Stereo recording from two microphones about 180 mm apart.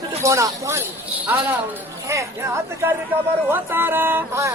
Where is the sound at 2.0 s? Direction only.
15° right (ahead or behind).